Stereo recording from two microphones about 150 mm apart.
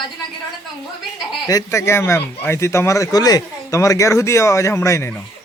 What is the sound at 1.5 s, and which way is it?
Speech, 20° left (ahead or behind).